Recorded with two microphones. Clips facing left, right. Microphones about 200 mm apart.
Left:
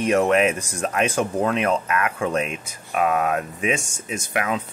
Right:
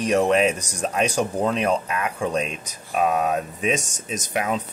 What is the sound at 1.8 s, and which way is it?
Speech, 90° left.